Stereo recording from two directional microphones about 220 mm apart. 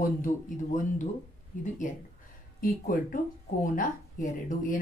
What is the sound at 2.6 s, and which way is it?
Speech, 40° left (ahead or behind).